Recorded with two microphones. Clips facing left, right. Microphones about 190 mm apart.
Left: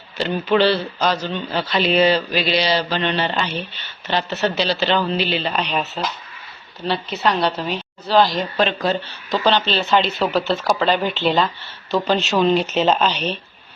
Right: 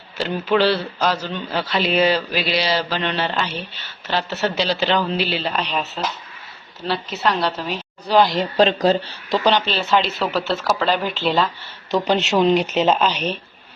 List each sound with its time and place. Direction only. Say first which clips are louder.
0.2 s a man's voice: left 1 dB; 5° right (ahead or behind)
6.8 s speech: left 1 dB; centre (ahead or behind)
8.0 s a woman's voice: even; 15° right (ahead or behind)
8.5 s speech: right 5 dB; 35° right (ahead or behind)
9.4 s speech: left 1 dB; 10° right (ahead or behind)
12.0 s a man's voice: right 1 dB; 20° right (ahead or behind)